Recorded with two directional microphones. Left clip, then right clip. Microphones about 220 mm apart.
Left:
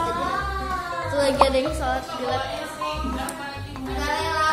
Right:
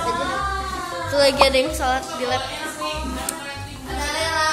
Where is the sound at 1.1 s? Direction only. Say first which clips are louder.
Right 4 dB; 20° right (ahead or behind).